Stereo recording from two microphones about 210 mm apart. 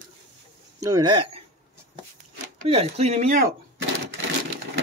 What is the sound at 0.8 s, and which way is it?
Speech, 20° right (ahead or behind).